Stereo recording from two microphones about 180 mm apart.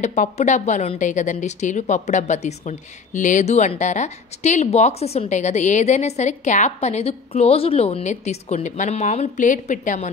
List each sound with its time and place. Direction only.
0.0 s a woman's voice: 40° left (ahead or behind)